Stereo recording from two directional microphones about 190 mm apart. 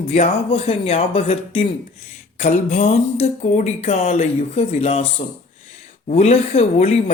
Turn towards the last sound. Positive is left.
turn(degrees=35)  # may be behind; listen again after turning